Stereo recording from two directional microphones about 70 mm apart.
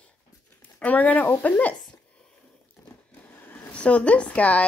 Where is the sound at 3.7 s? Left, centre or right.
Centre.